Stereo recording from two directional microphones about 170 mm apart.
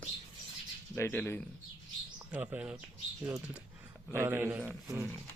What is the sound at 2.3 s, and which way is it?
Speech, 10° right (ahead or behind).